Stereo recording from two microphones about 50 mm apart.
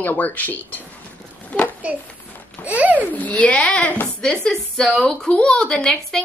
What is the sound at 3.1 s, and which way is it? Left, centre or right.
A woman's voice, left.